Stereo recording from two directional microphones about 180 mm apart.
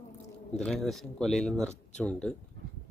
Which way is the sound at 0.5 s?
Centre (ahead or behind).